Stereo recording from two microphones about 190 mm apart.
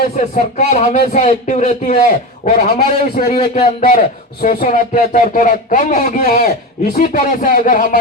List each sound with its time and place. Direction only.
0.5 s speech: 40° left (ahead or behind)
3.5 s speech: 35° left (ahead or behind)
3.8 s speech: 50° left (ahead or behind)